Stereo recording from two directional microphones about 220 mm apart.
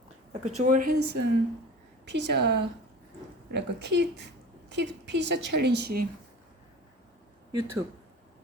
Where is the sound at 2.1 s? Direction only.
50° right (ahead or behind).